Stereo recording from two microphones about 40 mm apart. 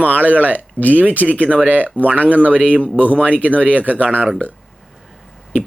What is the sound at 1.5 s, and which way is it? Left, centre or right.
A man's voice, right.